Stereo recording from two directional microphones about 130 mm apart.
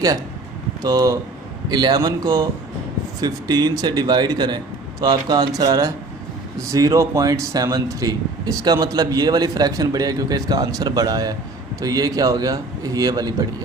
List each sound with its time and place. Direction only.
0.8 s a man's voice: 30° right (ahead or behind)